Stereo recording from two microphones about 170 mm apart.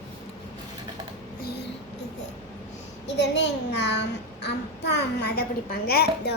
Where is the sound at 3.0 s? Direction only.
90° left; by 6.3 s 65° left (ahead or behind).